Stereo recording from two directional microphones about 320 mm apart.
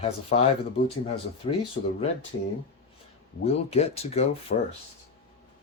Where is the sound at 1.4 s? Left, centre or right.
Centre.